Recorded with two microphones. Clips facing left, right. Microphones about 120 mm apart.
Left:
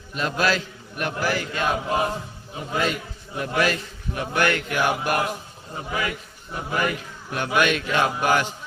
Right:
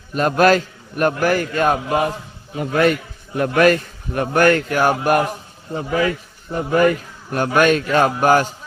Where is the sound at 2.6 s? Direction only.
65° right (ahead or behind).